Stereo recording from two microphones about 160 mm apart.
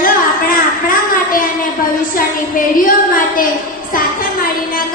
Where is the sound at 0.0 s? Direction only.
60° left (ahead or behind).